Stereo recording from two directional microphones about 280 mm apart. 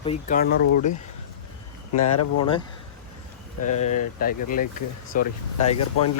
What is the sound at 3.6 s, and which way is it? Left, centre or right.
Speech, left.